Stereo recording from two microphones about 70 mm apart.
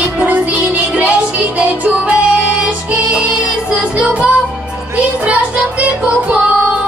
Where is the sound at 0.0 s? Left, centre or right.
Right.